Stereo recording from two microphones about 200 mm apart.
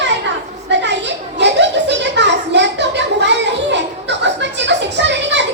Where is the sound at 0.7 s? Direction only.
60° right (ahead or behind).